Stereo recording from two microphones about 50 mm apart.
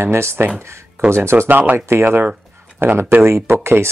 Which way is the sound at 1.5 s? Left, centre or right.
Right.